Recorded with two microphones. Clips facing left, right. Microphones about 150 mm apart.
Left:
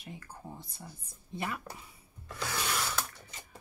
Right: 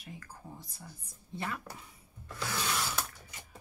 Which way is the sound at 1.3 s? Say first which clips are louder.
Left 1 dB; 15° left (ahead or behind).